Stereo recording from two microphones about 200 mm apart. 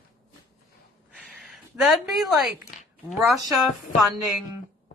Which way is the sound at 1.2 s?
Centre (ahead or behind).